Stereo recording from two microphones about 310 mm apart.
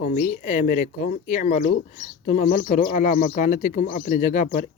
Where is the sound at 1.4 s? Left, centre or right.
Left.